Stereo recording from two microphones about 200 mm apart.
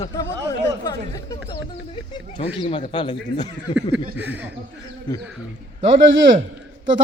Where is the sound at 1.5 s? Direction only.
25° left (ahead or behind).